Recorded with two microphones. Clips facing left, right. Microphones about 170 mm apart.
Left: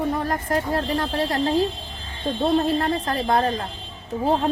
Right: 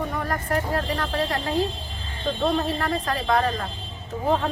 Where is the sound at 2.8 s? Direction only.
25° left (ahead or behind).